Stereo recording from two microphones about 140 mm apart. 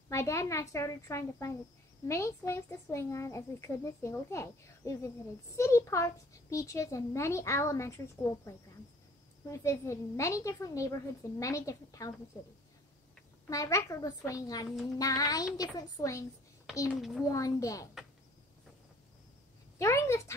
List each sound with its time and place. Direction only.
0.1 s speech: 20° left (ahead or behind)
9.5 s speech: 20° left (ahead or behind)
13.5 s speech: 20° left (ahead or behind)
16.9 s a child's voice: centre (ahead or behind)
17.3 s speech: 25° left (ahead or behind)
19.8 s speech: 20° left (ahead or behind)